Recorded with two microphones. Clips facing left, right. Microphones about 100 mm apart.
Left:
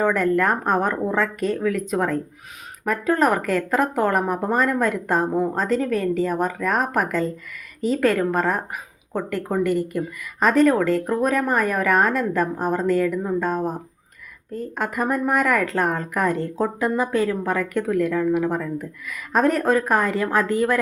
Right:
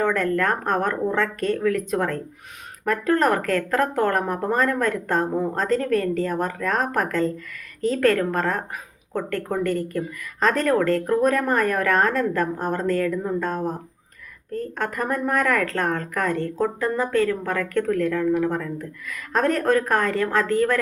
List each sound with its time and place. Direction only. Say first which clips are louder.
0.0 s speech: left 2 dB; 10° left (ahead or behind)